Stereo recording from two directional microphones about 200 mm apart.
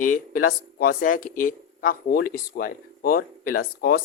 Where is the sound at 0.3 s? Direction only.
45° left (ahead or behind).